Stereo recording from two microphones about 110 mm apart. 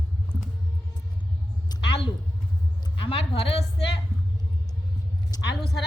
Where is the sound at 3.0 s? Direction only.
55° left (ahead or behind).